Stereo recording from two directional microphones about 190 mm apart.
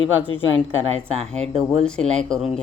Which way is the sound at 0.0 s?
90° left.